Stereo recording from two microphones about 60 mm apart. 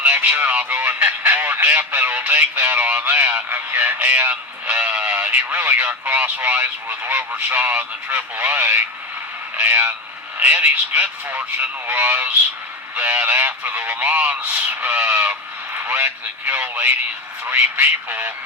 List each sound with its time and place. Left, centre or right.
0.0 s speech: right